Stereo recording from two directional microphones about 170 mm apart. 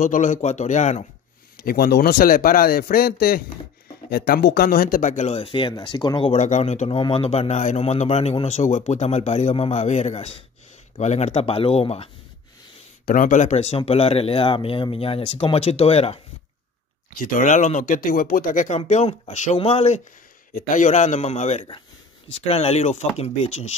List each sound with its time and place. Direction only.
0.0 s speech: 45° left (ahead or behind)
1.6 s speech: 60° left (ahead or behind); by 6.3 s 25° left (ahead or behind)
6.3 s speech: 45° left (ahead or behind)
13.0 s speech: 50° left (ahead or behind)
17.2 s speech: 50° left (ahead or behind)
18.9 s speech: 40° left (ahead or behind)
20.5 s speech: 50° left (ahead or behind)